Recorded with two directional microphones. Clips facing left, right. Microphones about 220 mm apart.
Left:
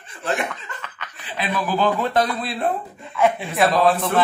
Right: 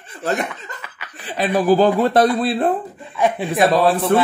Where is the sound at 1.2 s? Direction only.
40° right (ahead or behind).